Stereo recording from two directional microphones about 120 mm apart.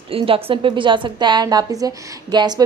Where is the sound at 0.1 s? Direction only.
50° right (ahead or behind).